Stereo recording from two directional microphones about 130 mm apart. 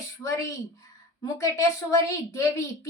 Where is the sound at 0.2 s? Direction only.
25° left (ahead or behind).